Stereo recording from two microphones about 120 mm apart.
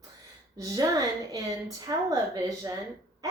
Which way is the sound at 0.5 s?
30° right (ahead or behind).